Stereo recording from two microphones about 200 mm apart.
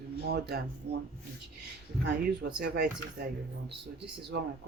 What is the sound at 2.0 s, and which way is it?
Speech, 55° right (ahead or behind).